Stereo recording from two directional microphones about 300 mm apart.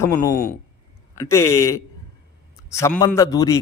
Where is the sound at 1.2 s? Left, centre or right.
Centre.